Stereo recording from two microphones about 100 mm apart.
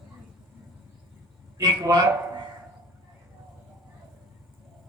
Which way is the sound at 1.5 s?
35° right (ahead or behind).